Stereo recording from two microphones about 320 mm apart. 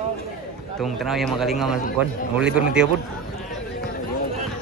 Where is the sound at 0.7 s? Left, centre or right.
Centre.